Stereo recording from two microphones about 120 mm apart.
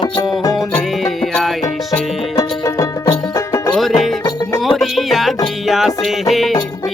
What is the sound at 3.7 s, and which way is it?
Music, centre (ahead or behind).